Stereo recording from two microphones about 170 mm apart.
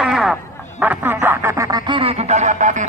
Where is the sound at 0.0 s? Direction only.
Centre (ahead or behind).